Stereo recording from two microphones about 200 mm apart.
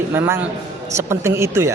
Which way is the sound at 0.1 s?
10° right (ahead or behind).